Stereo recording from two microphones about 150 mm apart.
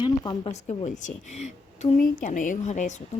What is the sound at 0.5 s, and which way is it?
Speech, 50° left (ahead or behind).